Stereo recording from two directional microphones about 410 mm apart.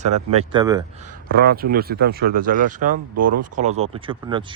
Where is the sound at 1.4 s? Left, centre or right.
Right.